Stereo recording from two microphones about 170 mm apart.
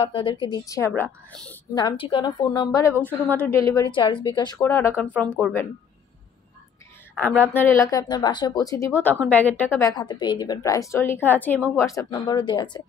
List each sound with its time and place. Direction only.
0.0 s a woman's voice: 30° left (ahead or behind)
1.3 s a woman's voice: 5° left (ahead or behind)
1.8 s a woman's voice: 30° left (ahead or behind)
3.0 s a woman's voice: 10° left (ahead or behind); by 4.6 s 25° left (ahead or behind)
4.6 s speech: 15° left (ahead or behind)
7.2 s a woman's voice: 10° left (ahead or behind); by 12.6 s 25° left (ahead or behind)